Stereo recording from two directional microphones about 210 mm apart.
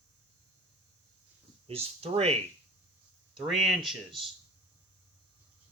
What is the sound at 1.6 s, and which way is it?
Speech, 30° right (ahead or behind).